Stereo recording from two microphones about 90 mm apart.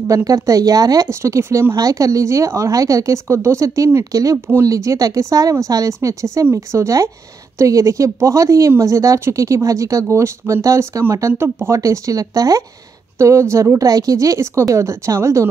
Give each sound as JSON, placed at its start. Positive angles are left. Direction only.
{"t": 0.1, "sound": "speech", "side_deg": -40}
{"t": 1.8, "sound": "speech", "side_deg": -35}